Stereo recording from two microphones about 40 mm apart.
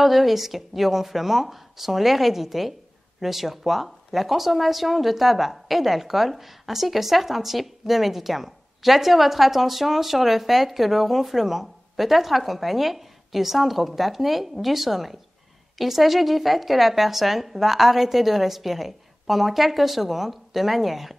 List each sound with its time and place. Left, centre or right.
0.0 s speech: centre